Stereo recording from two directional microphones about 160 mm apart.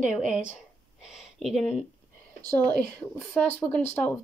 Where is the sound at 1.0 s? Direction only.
5° right (ahead or behind).